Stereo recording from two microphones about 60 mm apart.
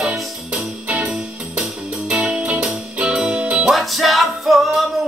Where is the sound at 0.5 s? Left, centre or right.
Right.